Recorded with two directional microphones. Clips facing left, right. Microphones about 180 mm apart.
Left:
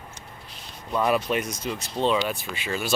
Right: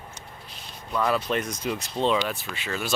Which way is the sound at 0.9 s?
20° left (ahead or behind).